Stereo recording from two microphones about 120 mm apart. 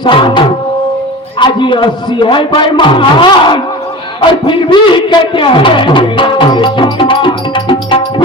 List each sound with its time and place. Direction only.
0.0 s a man's voice: 45° left (ahead or behind)
1.5 s a man's voice: 45° left (ahead or behind)